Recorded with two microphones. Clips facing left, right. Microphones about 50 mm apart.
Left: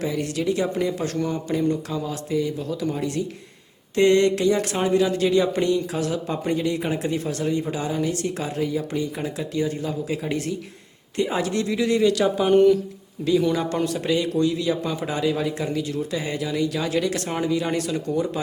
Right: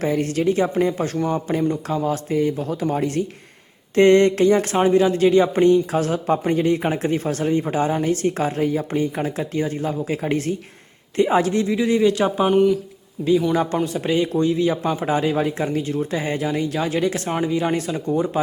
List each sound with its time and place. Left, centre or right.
0.0 s speech: right
11.6 s speech: centre
12.5 s speech: centre
13.5 s speech: right